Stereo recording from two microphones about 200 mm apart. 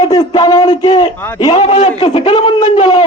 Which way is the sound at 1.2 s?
10° left (ahead or behind).